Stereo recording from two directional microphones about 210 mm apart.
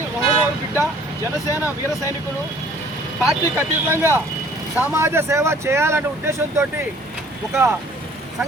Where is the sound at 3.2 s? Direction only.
5° right (ahead or behind).